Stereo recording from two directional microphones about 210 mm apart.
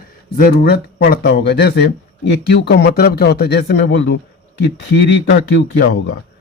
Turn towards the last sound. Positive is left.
turn(degrees=55)  # may be behind; listen again after turning